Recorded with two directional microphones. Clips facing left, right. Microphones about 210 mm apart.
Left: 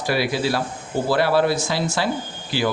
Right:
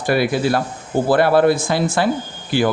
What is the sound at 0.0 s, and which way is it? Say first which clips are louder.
Speech: right 4 dB; 50° right (ahead or behind).